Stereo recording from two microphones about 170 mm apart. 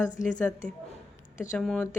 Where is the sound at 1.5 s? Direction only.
Centre (ahead or behind).